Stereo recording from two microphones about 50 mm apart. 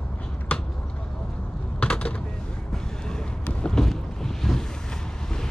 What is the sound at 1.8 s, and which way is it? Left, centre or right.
Mechanisms, left.